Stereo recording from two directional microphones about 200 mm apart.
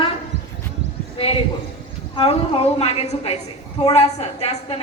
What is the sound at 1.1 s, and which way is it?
A man's voice, 30° left (ahead or behind).